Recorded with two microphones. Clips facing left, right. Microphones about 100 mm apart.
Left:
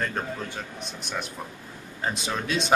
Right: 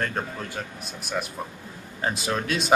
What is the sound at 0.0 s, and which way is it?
Speech, centre (ahead or behind).